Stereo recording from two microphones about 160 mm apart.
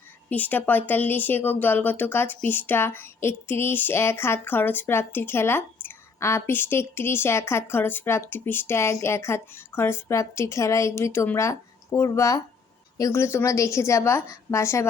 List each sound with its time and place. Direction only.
0.3 s a woman's voice: 10° left (ahead or behind)